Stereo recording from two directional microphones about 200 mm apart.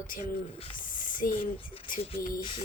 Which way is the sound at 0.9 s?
45° left (ahead or behind).